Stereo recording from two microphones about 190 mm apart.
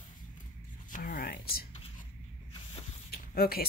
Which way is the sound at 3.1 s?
50° left (ahead or behind).